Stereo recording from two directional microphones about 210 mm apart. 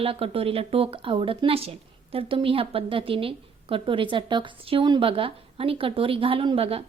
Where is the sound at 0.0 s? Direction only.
25° right (ahead or behind).